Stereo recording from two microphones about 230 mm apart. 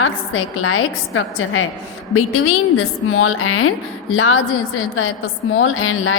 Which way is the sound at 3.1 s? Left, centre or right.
Left.